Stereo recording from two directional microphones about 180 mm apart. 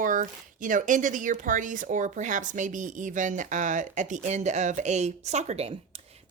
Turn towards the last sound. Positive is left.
turn(degrees=-35)  # may be behind; listen again after turning